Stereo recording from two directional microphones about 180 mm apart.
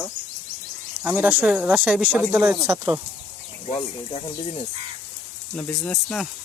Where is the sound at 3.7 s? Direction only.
30° left (ahead or behind).